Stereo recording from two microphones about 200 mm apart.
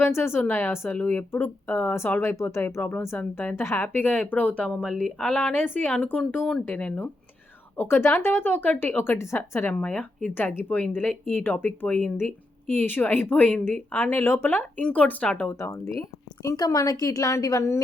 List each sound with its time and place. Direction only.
0.0 s a woman's voice: 10° left (ahead or behind)